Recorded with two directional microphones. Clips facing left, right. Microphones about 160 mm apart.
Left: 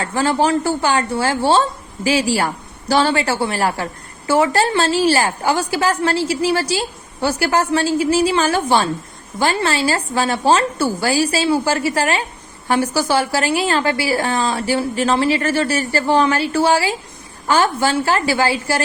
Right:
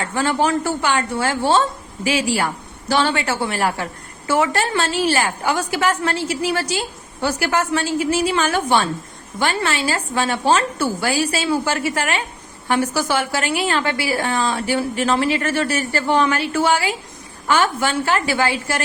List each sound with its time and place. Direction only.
0.0 s a woman's voice: 35° left (ahead or behind)